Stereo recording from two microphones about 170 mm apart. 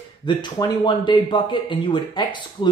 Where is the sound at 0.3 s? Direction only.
25° left (ahead or behind).